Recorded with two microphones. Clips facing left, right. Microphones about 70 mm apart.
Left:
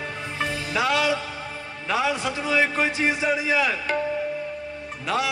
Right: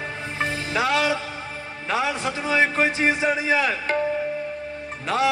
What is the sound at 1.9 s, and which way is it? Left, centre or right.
A man's voice, right.